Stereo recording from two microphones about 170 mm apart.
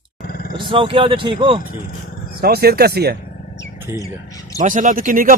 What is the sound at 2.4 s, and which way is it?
Speech, 65° right (ahead or behind).